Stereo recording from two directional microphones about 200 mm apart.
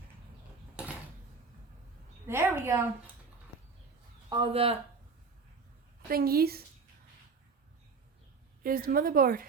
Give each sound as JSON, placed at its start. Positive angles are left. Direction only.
{"t": 2.2, "sound": "a woman's voice", "side_deg": -10}
{"t": 4.3, "sound": "speech", "side_deg": -25}
{"t": 6.1, "sound": "a woman's voice", "side_deg": -50}
{"t": 8.6, "sound": "a woman's voice", "side_deg": -45}